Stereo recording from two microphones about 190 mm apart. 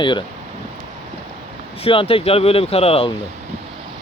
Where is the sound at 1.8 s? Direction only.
30° left (ahead or behind).